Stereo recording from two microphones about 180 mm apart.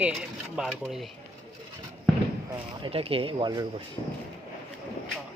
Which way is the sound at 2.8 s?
30° right (ahead or behind).